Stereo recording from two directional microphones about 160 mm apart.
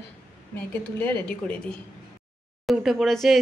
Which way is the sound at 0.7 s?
10° left (ahead or behind).